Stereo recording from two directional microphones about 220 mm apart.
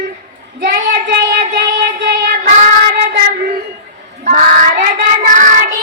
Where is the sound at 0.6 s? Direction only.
45° right (ahead or behind).